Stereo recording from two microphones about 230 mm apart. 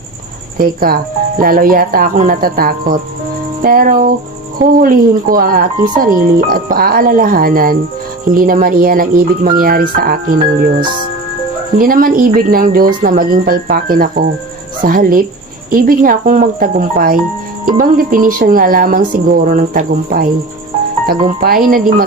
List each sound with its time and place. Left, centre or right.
0.6 s speech: right